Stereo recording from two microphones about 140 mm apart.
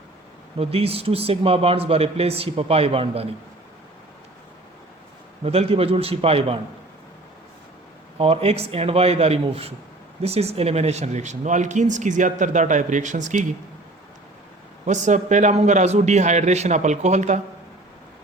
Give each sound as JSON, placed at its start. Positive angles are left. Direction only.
{"t": 0.6, "sound": "speech", "side_deg": -45}
{"t": 5.5, "sound": "speech", "side_deg": -45}
{"t": 8.2, "sound": "speech", "side_deg": -45}
{"t": 14.8, "sound": "speech", "side_deg": -60}